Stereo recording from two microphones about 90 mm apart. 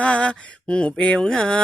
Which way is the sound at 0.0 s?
15° left (ahead or behind).